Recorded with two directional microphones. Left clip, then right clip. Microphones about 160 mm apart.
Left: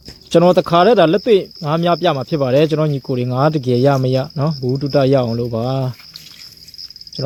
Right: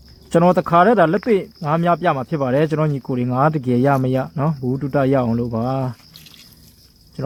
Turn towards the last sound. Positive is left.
turn(degrees=25)  # may be behind; listen again after turning